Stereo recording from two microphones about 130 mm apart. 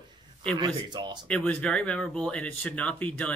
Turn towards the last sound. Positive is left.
turn(degrees=10)  # may be behind; listen again after turning